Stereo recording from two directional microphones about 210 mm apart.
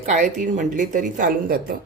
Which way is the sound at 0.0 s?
35° right (ahead or behind).